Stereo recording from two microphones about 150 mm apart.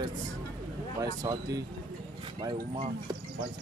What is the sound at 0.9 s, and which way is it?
Speech, 25° right (ahead or behind).